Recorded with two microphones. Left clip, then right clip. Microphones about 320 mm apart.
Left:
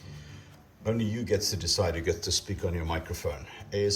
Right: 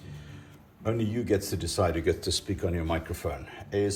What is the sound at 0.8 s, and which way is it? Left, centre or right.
Speech, centre.